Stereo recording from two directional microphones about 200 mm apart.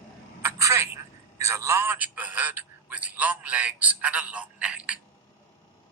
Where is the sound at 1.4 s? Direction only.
15° right (ahead or behind).